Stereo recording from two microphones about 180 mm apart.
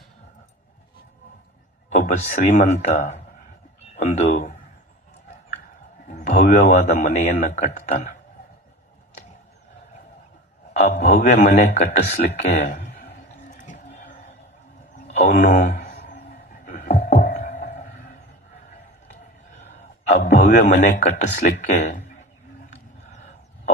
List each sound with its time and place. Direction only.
2.0 s a man's voice: 40° left (ahead or behind)
6.1 s a sound: 40° left (ahead or behind)
6.6 s a man's voice: 35° left (ahead or behind)
7.4 s a man's voice: 45° left (ahead or behind)
10.8 s a man's voice: 40° left (ahead or behind)
12.0 s speech: 60° left (ahead or behind)
12.5 s speech: 40° left (ahead or behind)
13.6 s a sound: 45° left (ahead or behind)
15.4 s a man's voice: 40° left (ahead or behind)
15.9 s a sound: 50° left (ahead or behind)
19.5 s gasp: 40° left (ahead or behind)
20.2 s a man's voice: 40° left (ahead or behind)